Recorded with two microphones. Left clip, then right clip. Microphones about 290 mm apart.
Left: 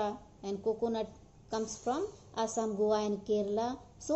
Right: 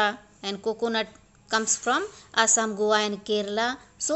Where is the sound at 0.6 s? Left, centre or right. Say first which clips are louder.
Right 6 dB; right.